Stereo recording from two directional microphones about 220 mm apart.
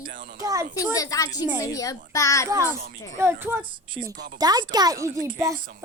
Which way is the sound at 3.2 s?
10° right (ahead or behind).